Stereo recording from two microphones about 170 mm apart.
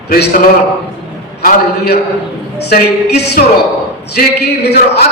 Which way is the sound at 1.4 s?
60° left (ahead or behind).